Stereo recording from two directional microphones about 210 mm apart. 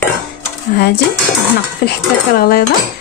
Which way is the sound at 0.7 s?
50° left (ahead or behind).